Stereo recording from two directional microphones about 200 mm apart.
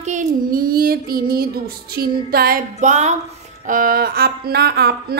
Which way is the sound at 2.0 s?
50° right (ahead or behind).